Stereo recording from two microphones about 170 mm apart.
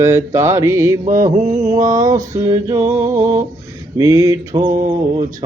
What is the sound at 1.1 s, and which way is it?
Mantra, 50° right (ahead or behind).